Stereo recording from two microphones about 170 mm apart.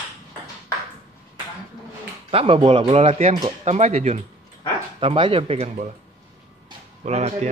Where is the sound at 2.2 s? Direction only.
35° right (ahead or behind).